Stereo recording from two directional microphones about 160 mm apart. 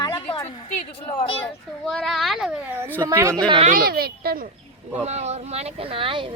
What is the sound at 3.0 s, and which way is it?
Speech, 20° right (ahead or behind).